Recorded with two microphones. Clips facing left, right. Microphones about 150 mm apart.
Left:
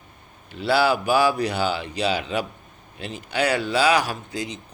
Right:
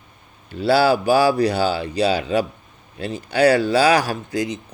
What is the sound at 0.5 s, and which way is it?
A man's voice, 35° right (ahead or behind).